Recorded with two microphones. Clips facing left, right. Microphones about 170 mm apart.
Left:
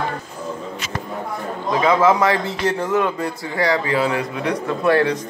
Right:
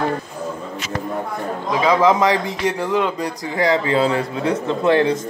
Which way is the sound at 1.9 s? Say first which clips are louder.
Right 1 dB; 15° right (ahead or behind).